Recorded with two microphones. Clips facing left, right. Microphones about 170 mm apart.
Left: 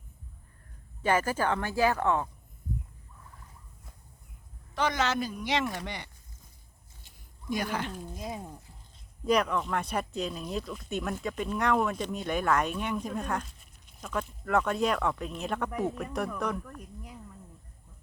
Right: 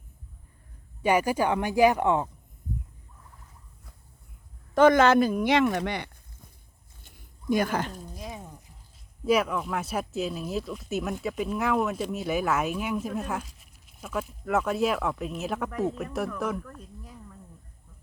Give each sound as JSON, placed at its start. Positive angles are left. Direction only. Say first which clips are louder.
{"t": 1.0, "sound": "speech", "louder": "right 4 dB", "side_deg": -15}
{"t": 4.7, "sound": "speech", "louder": "right 11 dB", "side_deg": -50}
{"t": 7.5, "sound": "speech", "louder": "right 6 dB", "side_deg": -50}
{"t": 8.2, "sound": "speech", "louder": "left 2 dB", "side_deg": 25}
{"t": 9.2, "sound": "speech", "louder": "right 2 dB", "side_deg": -5}
{"t": 16.6, "sound": "a sound", "louder": "even", "side_deg": 10}